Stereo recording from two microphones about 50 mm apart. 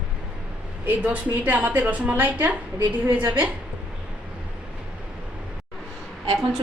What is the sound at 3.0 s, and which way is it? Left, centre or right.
Speech, right.